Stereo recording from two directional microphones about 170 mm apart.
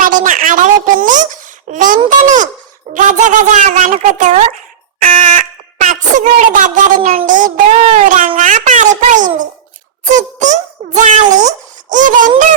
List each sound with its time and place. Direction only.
0.0 s a child's voice: 50° right (ahead or behind)
2.0 s child singing: 50° right (ahead or behind)
2.9 s speech: 50° right (ahead or behind)
7.0 s a sound: 35° right (ahead or behind)
7.3 s child singing: 50° right (ahead or behind)
8.4 s speech: 50° right (ahead or behind)
10.1 s music: 45° right (ahead or behind)
11.3 s a child's voice: 45° right (ahead or behind)